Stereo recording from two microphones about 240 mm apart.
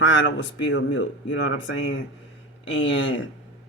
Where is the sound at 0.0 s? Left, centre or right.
Left.